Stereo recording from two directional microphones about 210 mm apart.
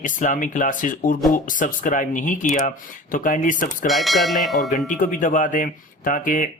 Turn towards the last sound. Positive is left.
turn(degrees=40)  # may be behind; listen again after turning